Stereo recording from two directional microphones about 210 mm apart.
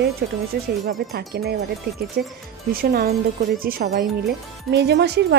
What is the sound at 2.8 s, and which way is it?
Speech, 45° right (ahead or behind).